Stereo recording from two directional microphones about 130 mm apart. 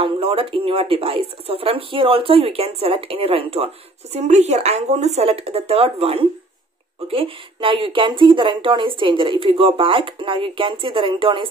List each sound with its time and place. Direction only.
0.0 s speech: 45° right (ahead or behind)